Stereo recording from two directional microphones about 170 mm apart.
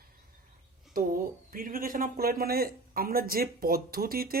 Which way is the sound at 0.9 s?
55° right (ahead or behind).